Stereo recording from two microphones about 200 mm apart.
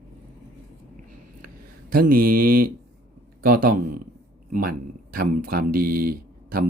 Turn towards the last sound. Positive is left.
turn(degrees=-45)  # may be behind; listen again after turning